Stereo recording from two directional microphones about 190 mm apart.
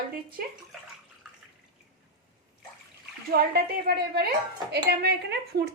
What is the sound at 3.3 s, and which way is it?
Speech, 55° right (ahead or behind).